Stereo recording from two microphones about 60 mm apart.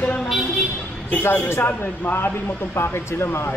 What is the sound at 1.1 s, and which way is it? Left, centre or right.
Speech, left.